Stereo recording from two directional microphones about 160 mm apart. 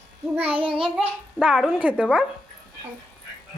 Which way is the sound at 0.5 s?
35° right (ahead or behind).